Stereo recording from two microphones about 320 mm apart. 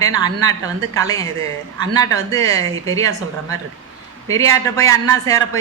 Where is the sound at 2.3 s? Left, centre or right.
Centre.